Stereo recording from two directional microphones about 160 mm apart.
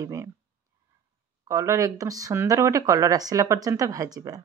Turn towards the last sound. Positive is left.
turn(degrees=-20)  # may be behind; listen again after turning